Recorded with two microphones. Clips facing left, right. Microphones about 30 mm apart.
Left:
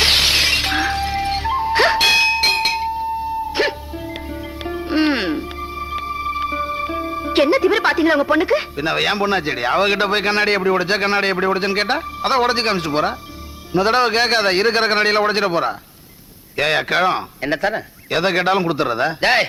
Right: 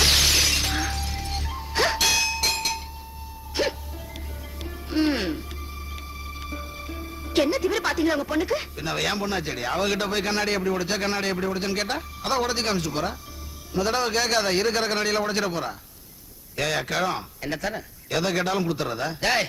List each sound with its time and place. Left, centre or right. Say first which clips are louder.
0.0 s music: left 5 dB; left
13.7 s a man's voice: left 8 dB; left